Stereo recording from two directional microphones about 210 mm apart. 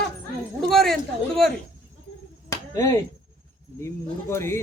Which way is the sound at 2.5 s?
15° left (ahead or behind).